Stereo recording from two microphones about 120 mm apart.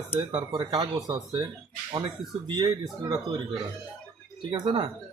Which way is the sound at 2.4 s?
35° right (ahead or behind).